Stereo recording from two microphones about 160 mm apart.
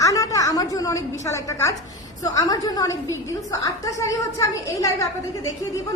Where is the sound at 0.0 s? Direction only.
20° left (ahead or behind).